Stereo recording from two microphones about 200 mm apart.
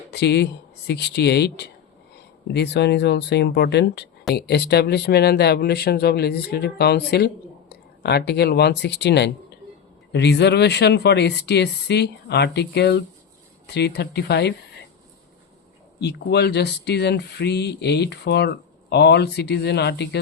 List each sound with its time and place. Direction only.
0.1 s speech: 55° left (ahead or behind)
16.0 s speech: 55° left (ahead or behind)